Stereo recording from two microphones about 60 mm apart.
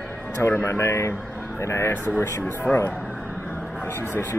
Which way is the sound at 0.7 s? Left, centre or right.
Left.